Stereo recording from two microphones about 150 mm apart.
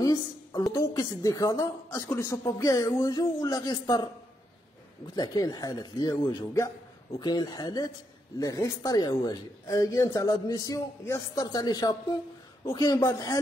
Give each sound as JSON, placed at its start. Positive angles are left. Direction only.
{"t": 0.0, "sound": "a woman's voice", "side_deg": 30}
{"t": 5.1, "sound": "a woman's voice", "side_deg": 25}